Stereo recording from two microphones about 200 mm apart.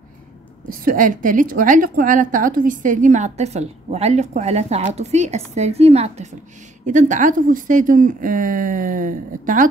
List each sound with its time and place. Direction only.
0.8 s a woman's voice: 40° right (ahead or behind)